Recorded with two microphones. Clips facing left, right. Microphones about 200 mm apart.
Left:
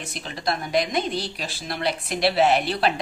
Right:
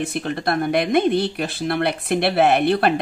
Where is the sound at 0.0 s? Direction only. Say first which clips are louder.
Right 7 dB; 55° right (ahead or behind).